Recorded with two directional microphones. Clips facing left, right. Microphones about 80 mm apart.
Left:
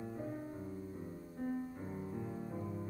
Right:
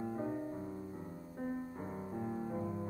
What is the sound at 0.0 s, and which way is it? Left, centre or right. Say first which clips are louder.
Music: right 5 dB; right.